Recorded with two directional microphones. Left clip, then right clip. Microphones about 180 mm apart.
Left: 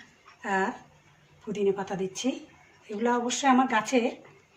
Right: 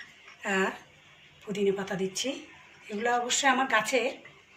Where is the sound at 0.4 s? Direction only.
60° left (ahead or behind).